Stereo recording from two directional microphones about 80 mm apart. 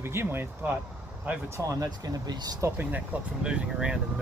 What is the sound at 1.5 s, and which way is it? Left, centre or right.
Speech, right.